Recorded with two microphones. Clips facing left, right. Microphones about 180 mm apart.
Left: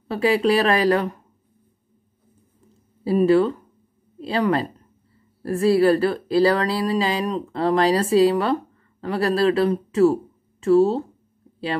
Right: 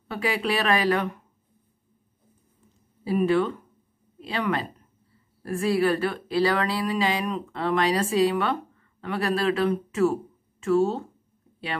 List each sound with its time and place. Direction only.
0.1 s speech: 35° left (ahead or behind)
3.0 s speech: 35° left (ahead or behind)